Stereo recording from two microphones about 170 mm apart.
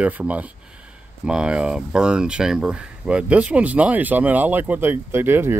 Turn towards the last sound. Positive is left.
turn(degrees=-15)  # may be behind; listen again after turning